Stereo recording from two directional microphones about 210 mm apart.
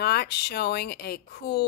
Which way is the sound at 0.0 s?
50° left (ahead or behind).